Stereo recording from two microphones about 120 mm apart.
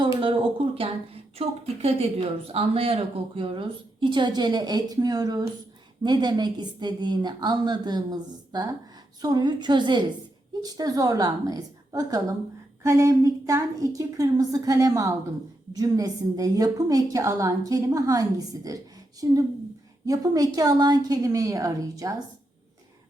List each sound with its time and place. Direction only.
0.2 s a woman's voice: 45° right (ahead or behind); by 22.1 s 30° right (ahead or behind)